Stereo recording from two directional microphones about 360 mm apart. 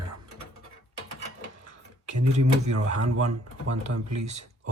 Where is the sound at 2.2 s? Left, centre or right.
Right.